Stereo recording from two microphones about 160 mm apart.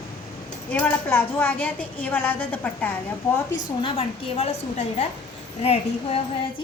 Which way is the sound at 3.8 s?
35° left (ahead or behind).